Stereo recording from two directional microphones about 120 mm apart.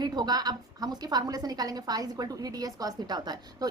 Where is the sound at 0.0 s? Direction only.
35° right (ahead or behind).